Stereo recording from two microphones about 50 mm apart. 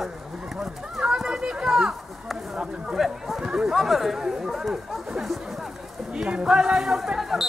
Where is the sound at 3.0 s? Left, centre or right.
Centre.